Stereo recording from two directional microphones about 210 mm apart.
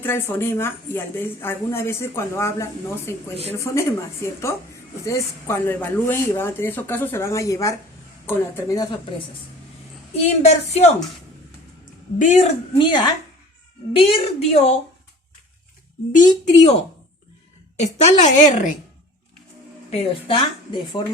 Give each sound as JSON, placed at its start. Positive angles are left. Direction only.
{"t": 0.0, "sound": "speech", "side_deg": 10}
{"t": 10.2, "sound": "a woman's voice", "side_deg": 30}
{"t": 12.2, "sound": "a woman's voice", "side_deg": 35}
{"t": 12.8, "sound": "a woman's voice", "side_deg": 20}
{"t": 17.7, "sound": "a woman's voice", "side_deg": 35}
{"t": 19.9, "sound": "a woman's voice", "side_deg": 25}